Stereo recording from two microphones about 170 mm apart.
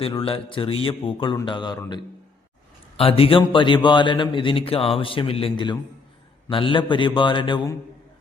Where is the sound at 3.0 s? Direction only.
35° left (ahead or behind).